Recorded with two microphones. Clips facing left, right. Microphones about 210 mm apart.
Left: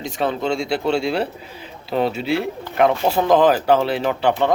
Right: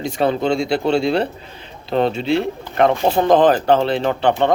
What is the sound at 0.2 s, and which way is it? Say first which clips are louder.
A man's voice: right 4 dB; centre (ahead or behind).